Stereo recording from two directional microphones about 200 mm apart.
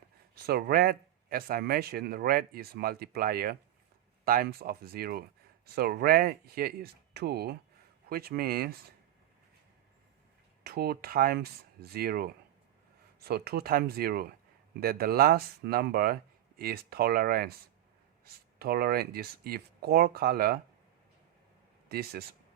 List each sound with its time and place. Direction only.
0.4 s speech: 50° right (ahead or behind)
10.6 s speech: 50° right (ahead or behind)
18.6 s speech: 50° right (ahead or behind)
21.8 s speech: 50° right (ahead or behind)